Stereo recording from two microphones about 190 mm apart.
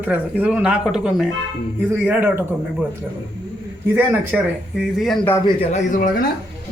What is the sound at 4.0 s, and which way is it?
Speech, 5° right (ahead or behind).